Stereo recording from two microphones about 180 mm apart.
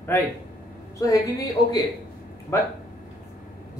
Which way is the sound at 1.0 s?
20° left (ahead or behind).